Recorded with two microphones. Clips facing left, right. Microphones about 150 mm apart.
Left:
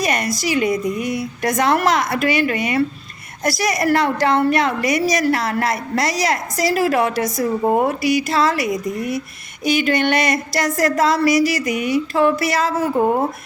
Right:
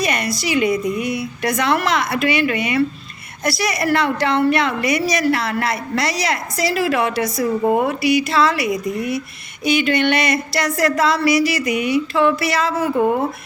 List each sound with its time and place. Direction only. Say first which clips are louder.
0.0 s a woman's voice: left 1 dB; 45° left (ahead or behind)